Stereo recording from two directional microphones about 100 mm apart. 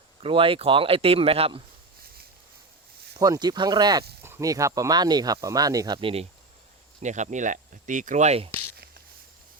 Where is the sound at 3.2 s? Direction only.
40° right (ahead or behind).